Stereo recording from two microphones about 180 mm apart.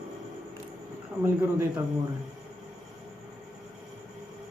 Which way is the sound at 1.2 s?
15° right (ahead or behind).